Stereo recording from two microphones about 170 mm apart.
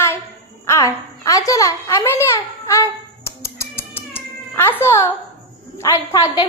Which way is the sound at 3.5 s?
15° left (ahead or behind).